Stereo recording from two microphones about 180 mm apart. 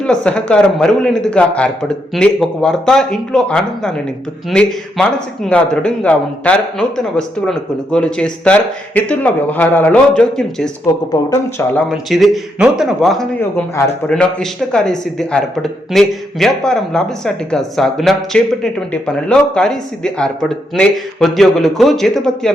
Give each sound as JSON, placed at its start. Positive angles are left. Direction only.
{"t": 0.0, "sound": "a man's voice", "side_deg": 5}
{"t": 11.9, "sound": "a man's voice", "side_deg": 0}